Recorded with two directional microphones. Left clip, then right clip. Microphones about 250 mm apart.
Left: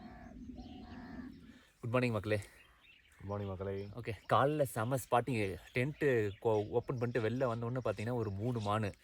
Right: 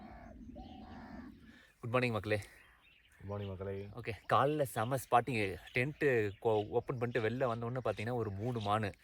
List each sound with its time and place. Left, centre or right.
0.9 s bird: right
1.8 s speech: centre